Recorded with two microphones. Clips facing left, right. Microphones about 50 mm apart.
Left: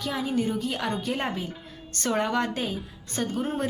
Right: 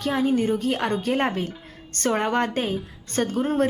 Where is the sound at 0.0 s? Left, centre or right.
Right.